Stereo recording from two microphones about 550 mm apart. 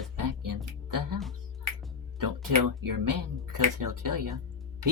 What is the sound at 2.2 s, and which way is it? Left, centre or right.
Speech, right.